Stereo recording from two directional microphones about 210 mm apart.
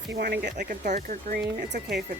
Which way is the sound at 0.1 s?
50° right (ahead or behind).